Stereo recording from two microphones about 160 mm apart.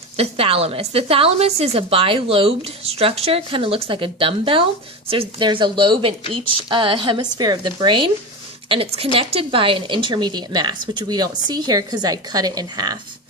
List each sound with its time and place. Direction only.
0.2 s a woman's voice: 35° right (ahead or behind)